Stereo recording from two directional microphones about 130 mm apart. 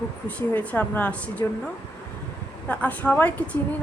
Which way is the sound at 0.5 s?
15° left (ahead or behind).